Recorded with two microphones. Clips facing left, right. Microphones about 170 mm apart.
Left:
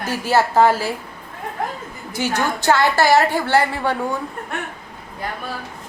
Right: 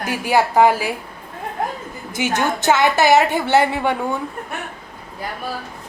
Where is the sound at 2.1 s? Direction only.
20° right (ahead or behind).